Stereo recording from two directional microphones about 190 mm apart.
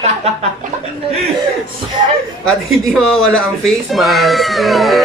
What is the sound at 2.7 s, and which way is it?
Speech, 5° left (ahead or behind).